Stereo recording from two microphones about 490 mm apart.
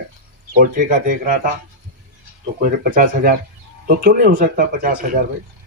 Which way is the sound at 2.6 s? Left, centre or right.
Centre.